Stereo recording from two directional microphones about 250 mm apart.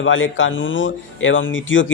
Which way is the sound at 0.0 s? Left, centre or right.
Left.